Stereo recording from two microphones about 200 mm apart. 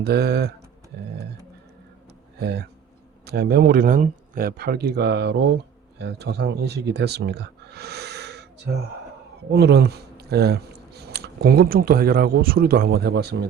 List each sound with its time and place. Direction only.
0.0 s speech: 55° right (ahead or behind)
2.4 s speech: 55° right (ahead or behind)